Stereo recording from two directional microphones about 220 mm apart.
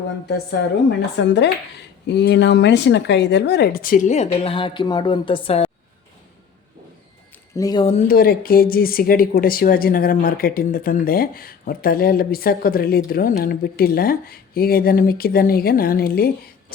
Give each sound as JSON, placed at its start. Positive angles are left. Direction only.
{"t": 0.9, "sound": "speech", "side_deg": 55}
{"t": 7.5, "sound": "speech", "side_deg": 15}
{"t": 7.9, "sound": "speech", "side_deg": 35}